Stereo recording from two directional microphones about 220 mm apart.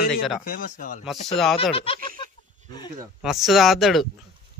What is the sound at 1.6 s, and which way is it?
Speech, 25° left (ahead or behind).